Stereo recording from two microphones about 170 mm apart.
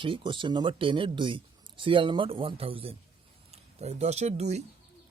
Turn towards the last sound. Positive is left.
turn(degrees=-40)  # may be behind; listen again after turning